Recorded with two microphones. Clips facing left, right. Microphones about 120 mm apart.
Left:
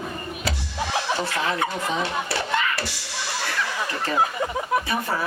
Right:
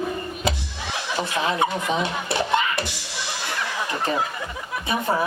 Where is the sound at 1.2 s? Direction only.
20° right (ahead or behind).